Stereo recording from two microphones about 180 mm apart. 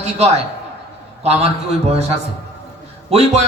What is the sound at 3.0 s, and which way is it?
Speech, 35° right (ahead or behind).